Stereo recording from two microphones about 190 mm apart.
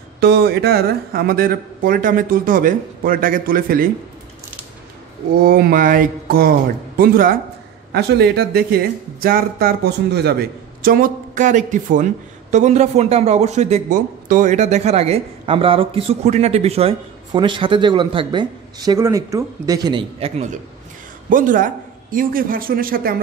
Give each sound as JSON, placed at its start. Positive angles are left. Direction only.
{"t": 0.2, "sound": "speech", "side_deg": -55}
{"t": 5.4, "sound": "speech", "side_deg": -50}
{"t": 7.9, "sound": "speech", "side_deg": -60}
{"t": 10.8, "sound": "speech", "side_deg": -45}
{"t": 21.3, "sound": "speech", "side_deg": -45}